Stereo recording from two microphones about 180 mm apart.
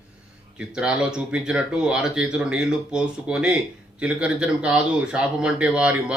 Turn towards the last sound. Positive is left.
turn(degrees=-5)  # may be behind; listen again after turning